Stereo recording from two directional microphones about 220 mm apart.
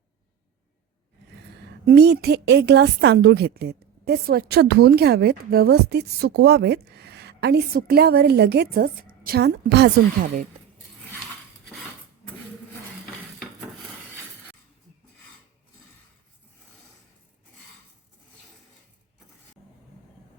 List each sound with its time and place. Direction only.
1.8 s a woman's voice: 45° right (ahead or behind)